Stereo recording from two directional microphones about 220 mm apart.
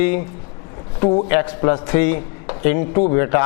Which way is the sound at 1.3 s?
20° left (ahead or behind).